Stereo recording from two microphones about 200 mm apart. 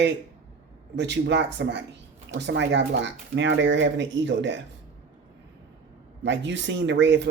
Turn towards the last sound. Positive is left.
turn(degrees=-60)  # may be behind; listen again after turning